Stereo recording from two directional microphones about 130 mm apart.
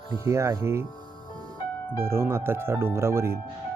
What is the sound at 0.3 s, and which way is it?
Speech, 20° right (ahead or behind).